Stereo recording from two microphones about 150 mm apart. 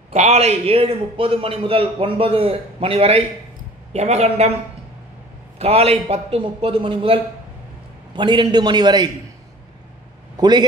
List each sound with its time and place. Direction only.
0.1 s a man's voice: 45° right (ahead or behind)
5.6 s a man's voice: 45° right (ahead or behind)
8.2 s a man's voice: 30° right (ahead or behind)
10.3 s a man's voice: 30° right (ahead or behind)